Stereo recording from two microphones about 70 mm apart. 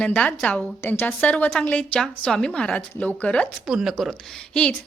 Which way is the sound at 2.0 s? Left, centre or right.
Centre.